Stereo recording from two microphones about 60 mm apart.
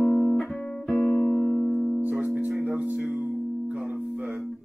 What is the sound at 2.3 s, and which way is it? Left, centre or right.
Music, right.